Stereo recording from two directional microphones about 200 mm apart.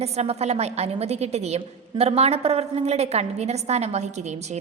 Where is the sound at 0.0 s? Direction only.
30° right (ahead or behind).